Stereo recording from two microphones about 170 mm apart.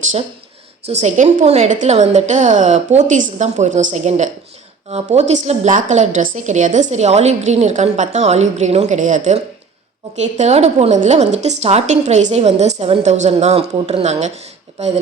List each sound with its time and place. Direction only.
0.9 s a woman's voice: 45° right (ahead or behind)